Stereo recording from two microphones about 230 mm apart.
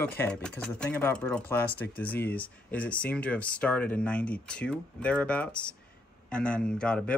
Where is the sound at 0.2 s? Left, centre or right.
Centre.